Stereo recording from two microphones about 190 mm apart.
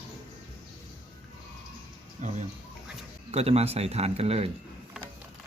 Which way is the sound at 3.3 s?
35° right (ahead or behind).